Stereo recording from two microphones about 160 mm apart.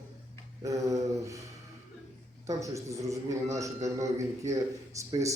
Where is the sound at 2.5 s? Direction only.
20° right (ahead or behind).